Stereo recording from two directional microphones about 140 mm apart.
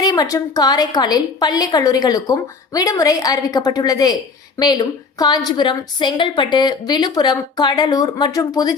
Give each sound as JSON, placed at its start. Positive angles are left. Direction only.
{"t": 0.0, "sound": "a woman's voice", "side_deg": 30}